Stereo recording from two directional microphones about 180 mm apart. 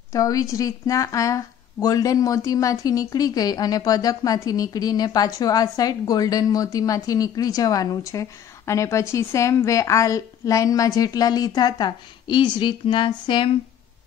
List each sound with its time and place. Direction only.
0.1 s a woman's voice: 20° left (ahead or behind)